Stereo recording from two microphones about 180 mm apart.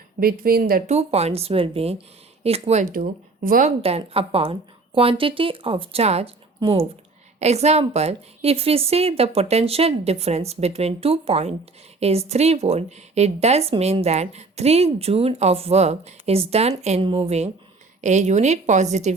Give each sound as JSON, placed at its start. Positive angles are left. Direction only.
{"t": 0.2, "sound": "speech", "side_deg": -55}
{"t": 0.9, "sound": "speech", "side_deg": -35}
{"t": 2.9, "sound": "speech", "side_deg": -50}
{"t": 3.8, "sound": "speech", "side_deg": -35}